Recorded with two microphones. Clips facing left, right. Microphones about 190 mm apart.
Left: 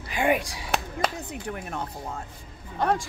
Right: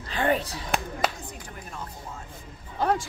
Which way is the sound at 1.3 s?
65° left (ahead or behind).